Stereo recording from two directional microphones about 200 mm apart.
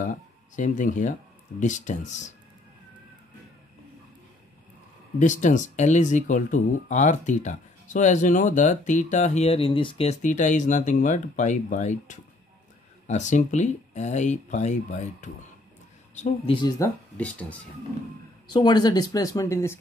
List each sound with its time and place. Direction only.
0.0 s speech: 40° left (ahead or behind)
5.2 s speech: 40° left (ahead or behind)
16.5 s speech: 20° left (ahead or behind)
18.5 s speech: 20° left (ahead or behind)